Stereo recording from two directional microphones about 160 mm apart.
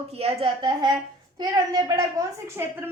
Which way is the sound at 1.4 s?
25° right (ahead or behind).